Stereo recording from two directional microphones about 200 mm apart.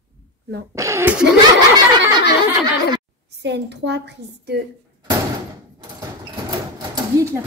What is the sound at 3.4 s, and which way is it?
A woman's voice, 60° right (ahead or behind).